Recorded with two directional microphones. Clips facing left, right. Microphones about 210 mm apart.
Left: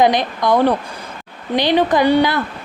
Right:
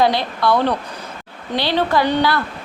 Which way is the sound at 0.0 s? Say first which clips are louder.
Left 2 dB; 15° left (ahead or behind).